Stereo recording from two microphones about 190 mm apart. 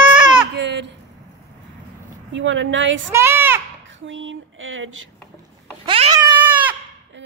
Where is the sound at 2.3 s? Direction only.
75° right (ahead or behind).